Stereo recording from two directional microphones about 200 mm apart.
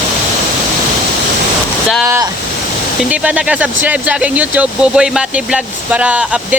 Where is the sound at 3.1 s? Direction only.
5° right (ahead or behind).